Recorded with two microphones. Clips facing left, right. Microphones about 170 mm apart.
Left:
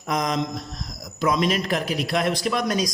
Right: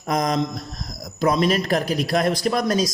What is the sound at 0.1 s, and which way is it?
A man's voice, 40° right (ahead or behind).